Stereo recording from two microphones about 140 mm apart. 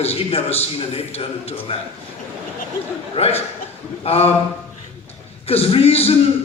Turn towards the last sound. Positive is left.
turn(degrees=45)  # may be behind; listen again after turning